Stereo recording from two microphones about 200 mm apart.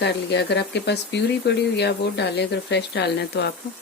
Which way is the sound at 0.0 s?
60° left (ahead or behind).